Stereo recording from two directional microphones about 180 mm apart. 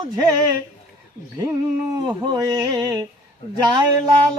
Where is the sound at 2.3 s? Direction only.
20° right (ahead or behind).